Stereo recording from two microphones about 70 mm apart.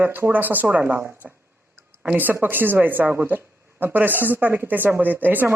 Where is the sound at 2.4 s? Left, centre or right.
Right.